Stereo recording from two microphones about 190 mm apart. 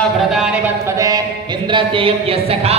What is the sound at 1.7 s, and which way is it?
Speech, 25° right (ahead or behind).